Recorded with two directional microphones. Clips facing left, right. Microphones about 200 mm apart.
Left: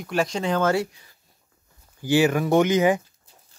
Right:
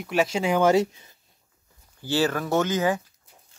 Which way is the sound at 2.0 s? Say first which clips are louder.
Left 5 dB; 15° left (ahead or behind).